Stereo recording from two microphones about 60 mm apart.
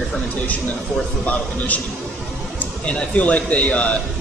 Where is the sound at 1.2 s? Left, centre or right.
Left.